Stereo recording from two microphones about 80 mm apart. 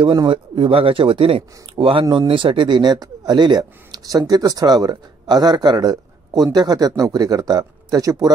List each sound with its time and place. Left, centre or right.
0.0 s speech: right